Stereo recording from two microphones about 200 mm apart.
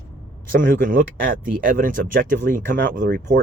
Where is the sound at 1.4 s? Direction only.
45° right (ahead or behind); by 3.4 s 60° right (ahead or behind).